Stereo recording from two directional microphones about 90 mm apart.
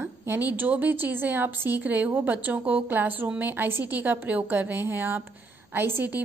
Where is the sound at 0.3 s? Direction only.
20° right (ahead or behind).